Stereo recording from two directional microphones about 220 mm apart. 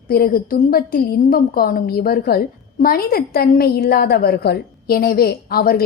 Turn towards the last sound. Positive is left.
turn(degrees=45)  # may be behind; listen again after turning